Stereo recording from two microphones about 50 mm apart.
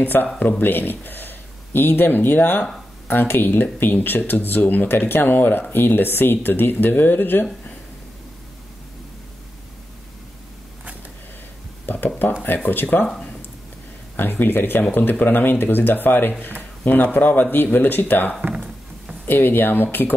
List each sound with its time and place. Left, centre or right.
0.0 s speech: left
11.8 s a sound: left
12.6 s speech: left
13.0 s speech: centre
14.1 s speech: left
18.5 s a sound: centre
19.2 s speech: left